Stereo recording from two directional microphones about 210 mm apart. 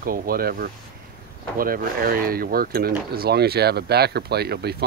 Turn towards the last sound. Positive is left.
turn(degrees=-50)  # may be behind; listen again after turning